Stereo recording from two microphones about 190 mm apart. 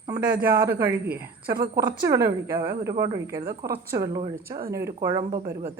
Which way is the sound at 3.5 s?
55° right (ahead or behind).